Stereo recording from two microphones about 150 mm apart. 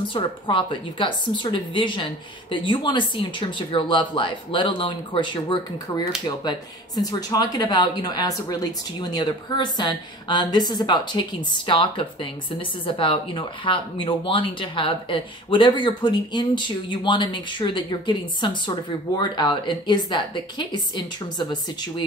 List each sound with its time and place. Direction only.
0.0 s a woman's voice: 35° left (ahead or behind)